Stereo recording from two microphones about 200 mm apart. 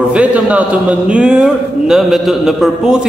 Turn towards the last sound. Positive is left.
turn(degrees=-5)  # may be behind; listen again after turning